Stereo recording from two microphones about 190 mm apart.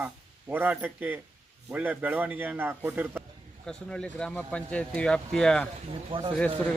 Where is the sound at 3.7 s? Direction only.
5° left (ahead or behind).